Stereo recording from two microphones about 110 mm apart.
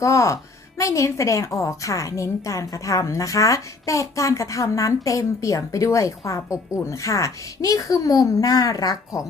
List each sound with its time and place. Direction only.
0.0 s a woman's voice: 30° left (ahead or behind)